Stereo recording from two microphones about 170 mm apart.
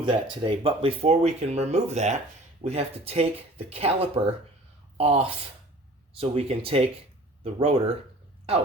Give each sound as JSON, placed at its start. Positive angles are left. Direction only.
{"t": 0.0, "sound": "speech", "side_deg": -30}